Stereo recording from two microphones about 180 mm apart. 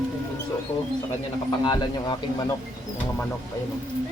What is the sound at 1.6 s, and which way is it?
Speech, 20° left (ahead or behind).